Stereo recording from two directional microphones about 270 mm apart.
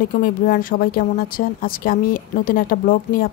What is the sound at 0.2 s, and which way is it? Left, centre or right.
A woman's voice, left.